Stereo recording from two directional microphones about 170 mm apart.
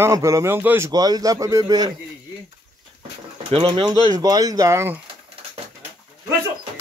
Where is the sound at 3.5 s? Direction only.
30° right (ahead or behind).